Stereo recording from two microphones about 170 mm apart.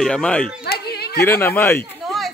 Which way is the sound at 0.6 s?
70° left (ahead or behind).